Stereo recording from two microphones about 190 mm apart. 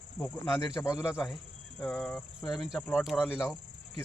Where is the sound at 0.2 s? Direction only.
10° left (ahead or behind).